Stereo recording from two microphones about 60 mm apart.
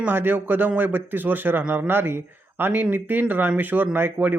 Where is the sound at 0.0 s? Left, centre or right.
Right.